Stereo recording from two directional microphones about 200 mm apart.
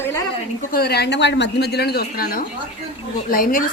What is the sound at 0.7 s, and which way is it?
Speech, 50° left (ahead or behind).